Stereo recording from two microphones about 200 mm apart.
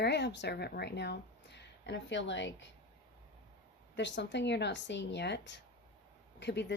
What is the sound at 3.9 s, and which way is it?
Speech, 60° left (ahead or behind).